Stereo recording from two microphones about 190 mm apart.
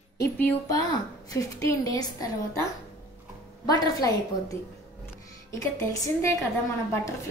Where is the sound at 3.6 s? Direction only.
20° left (ahead or behind).